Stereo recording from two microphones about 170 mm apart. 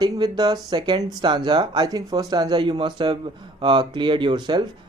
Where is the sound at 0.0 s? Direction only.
25° right (ahead or behind).